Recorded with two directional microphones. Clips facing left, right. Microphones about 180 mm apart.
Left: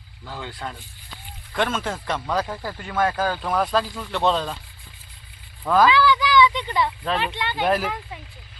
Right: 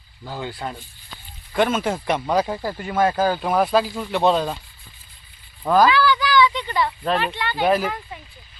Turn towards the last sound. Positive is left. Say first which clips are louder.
# right 3 dB
turn(degrees=-5)  # may be behind; listen again after turning